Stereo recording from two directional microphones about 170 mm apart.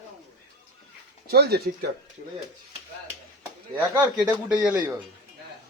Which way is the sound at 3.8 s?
10° right (ahead or behind).